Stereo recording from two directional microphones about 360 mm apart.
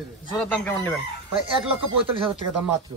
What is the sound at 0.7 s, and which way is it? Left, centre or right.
A man's voice, centre.